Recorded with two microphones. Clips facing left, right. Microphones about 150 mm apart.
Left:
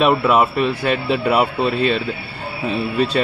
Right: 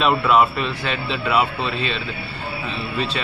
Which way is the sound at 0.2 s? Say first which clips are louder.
Left 2 dB; 55° left (ahead or behind).